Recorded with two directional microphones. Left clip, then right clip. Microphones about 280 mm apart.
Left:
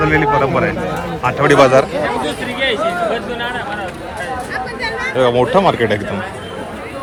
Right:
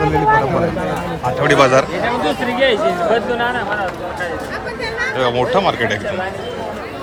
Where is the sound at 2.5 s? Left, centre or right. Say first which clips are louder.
Right 1 dB; right.